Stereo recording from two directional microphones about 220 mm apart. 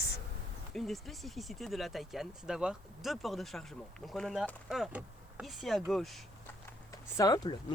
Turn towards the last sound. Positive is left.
turn(degrees=15)  # may be behind; listen again after turning